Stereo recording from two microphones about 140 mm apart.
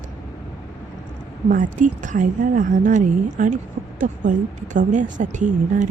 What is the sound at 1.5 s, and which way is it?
A woman's voice, 65° right (ahead or behind).